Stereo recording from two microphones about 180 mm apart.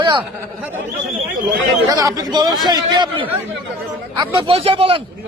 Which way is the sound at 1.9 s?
20° right (ahead or behind).